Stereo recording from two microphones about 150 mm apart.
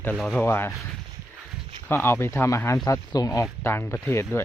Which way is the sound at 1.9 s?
15° left (ahead or behind).